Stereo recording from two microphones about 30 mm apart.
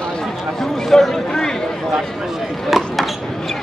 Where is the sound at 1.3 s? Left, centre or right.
Left.